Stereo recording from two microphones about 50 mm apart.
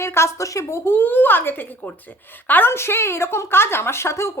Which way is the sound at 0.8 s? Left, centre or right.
Left.